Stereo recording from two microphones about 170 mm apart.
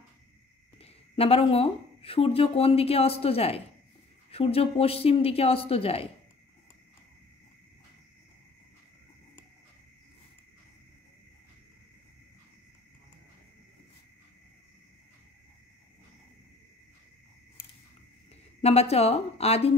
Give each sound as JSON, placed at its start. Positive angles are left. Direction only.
{"t": 0.7, "sound": "speech", "side_deg": 35}
{"t": 18.6, "sound": "a woman's voice", "side_deg": 35}